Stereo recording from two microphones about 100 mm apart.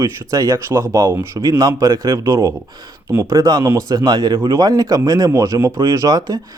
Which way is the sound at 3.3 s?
45° right (ahead or behind).